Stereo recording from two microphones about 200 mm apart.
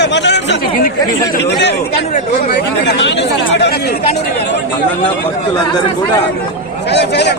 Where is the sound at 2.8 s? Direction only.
60° left (ahead or behind).